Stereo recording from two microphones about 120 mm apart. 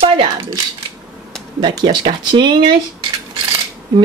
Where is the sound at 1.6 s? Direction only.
40° right (ahead or behind).